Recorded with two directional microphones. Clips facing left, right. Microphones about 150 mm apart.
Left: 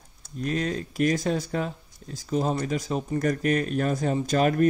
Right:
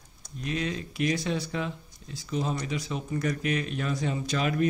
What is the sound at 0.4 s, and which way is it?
Speech, 40° left (ahead or behind).